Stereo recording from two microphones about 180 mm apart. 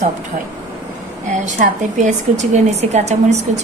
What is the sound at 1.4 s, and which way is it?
A woman's voice, 45° right (ahead or behind).